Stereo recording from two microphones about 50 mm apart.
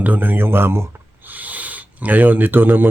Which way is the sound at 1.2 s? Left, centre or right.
Right.